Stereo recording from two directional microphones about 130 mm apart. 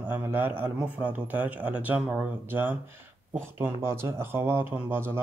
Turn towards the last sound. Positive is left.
turn(degrees=-20)  # may be behind; listen again after turning